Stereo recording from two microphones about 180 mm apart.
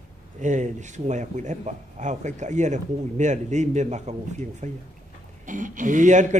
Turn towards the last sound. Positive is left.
turn(degrees=-40)  # may be behind; listen again after turning